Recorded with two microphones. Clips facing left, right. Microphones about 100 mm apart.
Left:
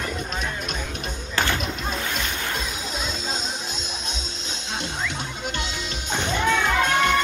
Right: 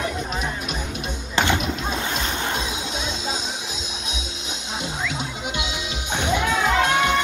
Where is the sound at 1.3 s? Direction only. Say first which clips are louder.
Right 4 dB; 20° right (ahead or behind).